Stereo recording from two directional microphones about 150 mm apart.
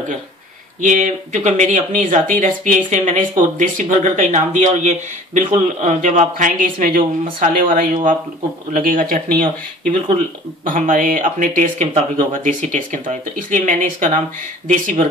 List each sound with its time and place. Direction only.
0.8 s speech: 55° right (ahead or behind)